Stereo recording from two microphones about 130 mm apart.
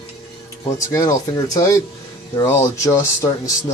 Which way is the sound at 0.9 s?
25° left (ahead or behind).